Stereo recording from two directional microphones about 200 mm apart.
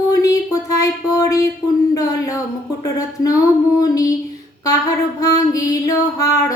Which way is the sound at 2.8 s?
15° left (ahead or behind).